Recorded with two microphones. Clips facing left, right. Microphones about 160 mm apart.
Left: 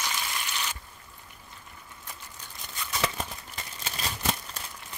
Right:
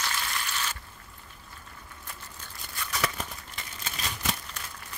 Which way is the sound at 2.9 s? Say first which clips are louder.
Left 1 dB; 25° left (ahead or behind).